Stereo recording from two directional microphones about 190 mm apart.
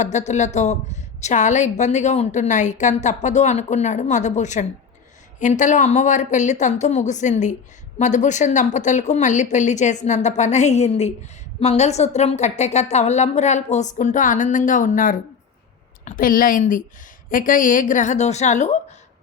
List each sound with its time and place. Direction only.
0.0 s a woman's voice: 40° left (ahead or behind)